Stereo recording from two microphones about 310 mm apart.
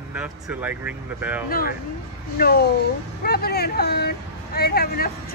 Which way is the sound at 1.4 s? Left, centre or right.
Left.